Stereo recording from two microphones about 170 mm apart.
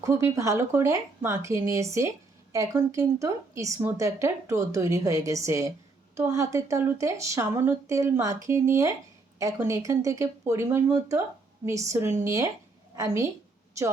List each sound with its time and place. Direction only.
0.0 s speech: 15° right (ahead or behind)